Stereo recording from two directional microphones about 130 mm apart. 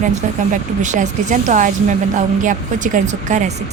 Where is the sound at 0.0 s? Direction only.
70° right (ahead or behind).